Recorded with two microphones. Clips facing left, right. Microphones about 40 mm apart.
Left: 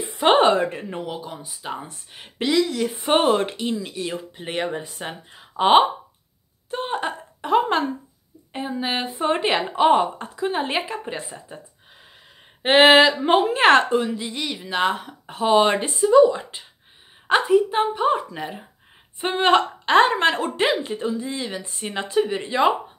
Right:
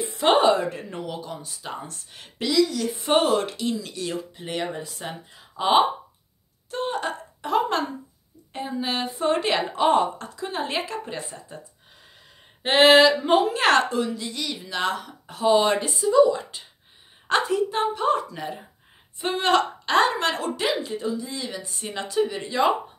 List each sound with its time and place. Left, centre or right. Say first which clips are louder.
0.2 s speech: left 2 dB; left
0.7 s a woman's voice: left 2 dB; left
2.3 s a woman's voice: left 1 dB; left
4.7 s speech: left 2 dB; left
6.7 s a sound: left 1 dB; left
8.5 s a woman's voice: left 2 dB; left
12.6 s a woman's voice: left 2 dB; left